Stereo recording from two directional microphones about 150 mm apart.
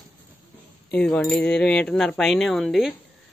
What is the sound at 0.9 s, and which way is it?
Speech, 5° left (ahead or behind).